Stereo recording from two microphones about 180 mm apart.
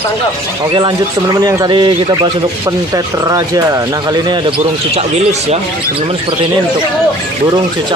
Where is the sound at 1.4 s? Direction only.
20° right (ahead or behind).